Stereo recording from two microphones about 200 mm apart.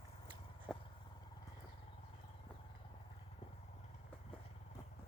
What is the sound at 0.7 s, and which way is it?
Vehicle, centre (ahead or behind).